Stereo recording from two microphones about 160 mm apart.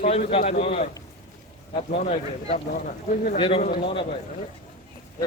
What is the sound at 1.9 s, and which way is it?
Speech, 45° left (ahead or behind).